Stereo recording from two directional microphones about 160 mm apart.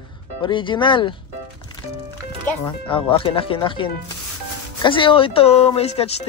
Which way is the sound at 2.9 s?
35° left (ahead or behind).